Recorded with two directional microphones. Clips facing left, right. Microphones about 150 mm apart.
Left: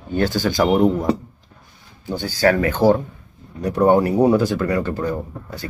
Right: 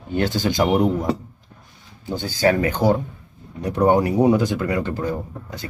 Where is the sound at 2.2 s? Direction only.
20° right (ahead or behind).